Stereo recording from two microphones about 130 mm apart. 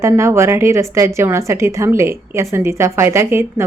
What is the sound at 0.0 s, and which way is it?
A woman's voice, 20° right (ahead or behind).